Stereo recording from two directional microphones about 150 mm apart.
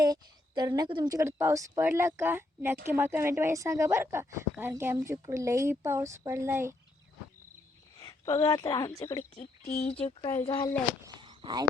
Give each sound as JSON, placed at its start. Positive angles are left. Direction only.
{"t": 0.0, "sound": "a woman's voice", "side_deg": -25}
{"t": 7.9, "sound": "a sound", "side_deg": 20}
{"t": 8.4, "sound": "a woman's voice", "side_deg": 30}
{"t": 11.2, "sound": "fireworks", "side_deg": -30}